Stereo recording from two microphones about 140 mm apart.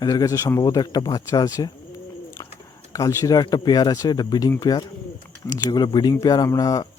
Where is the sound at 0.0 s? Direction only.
25° left (ahead or behind).